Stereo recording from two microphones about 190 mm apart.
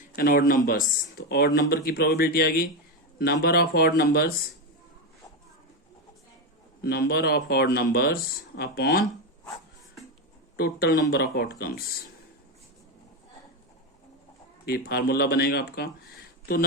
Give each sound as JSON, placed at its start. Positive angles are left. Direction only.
{"t": 0.2, "sound": "speech", "side_deg": 50}
{"t": 6.8, "sound": "speech", "side_deg": 55}
{"t": 10.6, "sound": "speech", "side_deg": 55}
{"t": 14.6, "sound": "speech", "side_deg": 55}